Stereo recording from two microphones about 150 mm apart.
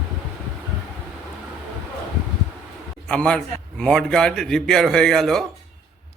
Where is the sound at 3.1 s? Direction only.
5° left (ahead or behind).